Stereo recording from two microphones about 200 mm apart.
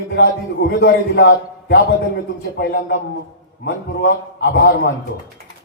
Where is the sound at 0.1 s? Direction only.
50° left (ahead or behind).